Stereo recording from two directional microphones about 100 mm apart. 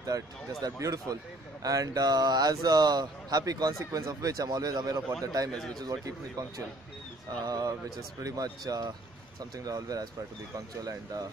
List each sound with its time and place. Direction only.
0.0 s speech: 35° right (ahead or behind)
5.5 s a man's voice: 10° left (ahead or behind)
5.8 s speech: 40° right (ahead or behind)
7.4 s speech: 40° right (ahead or behind)